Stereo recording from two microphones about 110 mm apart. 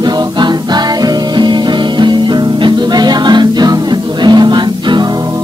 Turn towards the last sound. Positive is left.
turn(degrees=-40)  # may be behind; listen again after turning